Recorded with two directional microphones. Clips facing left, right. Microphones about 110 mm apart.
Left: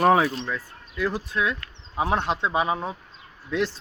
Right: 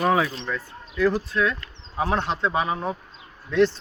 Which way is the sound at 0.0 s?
30° left (ahead or behind).